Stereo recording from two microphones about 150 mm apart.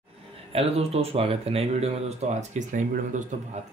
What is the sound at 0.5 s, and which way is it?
Speech, 40° right (ahead or behind).